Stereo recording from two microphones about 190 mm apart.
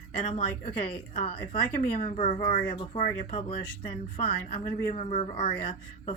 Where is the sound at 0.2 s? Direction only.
40° left (ahead or behind).